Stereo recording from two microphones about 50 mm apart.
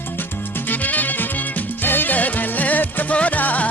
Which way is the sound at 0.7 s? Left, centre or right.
Left.